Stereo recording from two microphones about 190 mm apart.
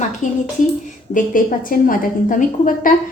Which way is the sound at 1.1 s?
45° left (ahead or behind).